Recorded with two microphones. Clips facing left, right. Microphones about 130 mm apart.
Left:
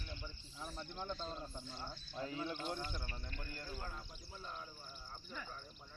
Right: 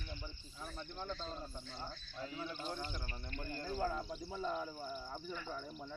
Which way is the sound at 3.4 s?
30° right (ahead or behind).